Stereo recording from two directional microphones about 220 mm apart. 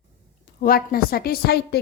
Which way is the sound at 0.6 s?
40° left (ahead or behind).